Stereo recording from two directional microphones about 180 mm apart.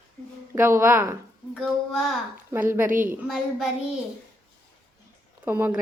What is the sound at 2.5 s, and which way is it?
Speech, 10° right (ahead or behind).